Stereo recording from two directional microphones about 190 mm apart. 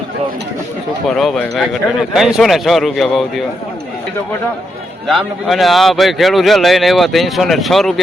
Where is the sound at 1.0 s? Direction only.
Centre (ahead or behind).